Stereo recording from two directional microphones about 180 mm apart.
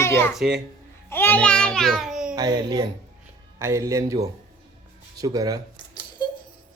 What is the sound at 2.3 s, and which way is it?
Speech, 20° right (ahead or behind).